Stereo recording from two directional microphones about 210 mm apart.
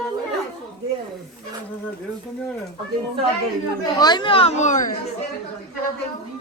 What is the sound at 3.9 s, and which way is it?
Speech, 20° left (ahead or behind).